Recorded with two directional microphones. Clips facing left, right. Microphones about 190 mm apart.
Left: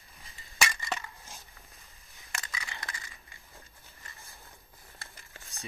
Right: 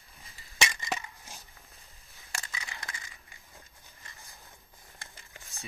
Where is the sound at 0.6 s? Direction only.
20° right (ahead or behind).